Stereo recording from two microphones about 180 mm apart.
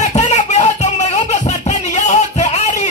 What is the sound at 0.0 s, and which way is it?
Music, 40° left (ahead or behind).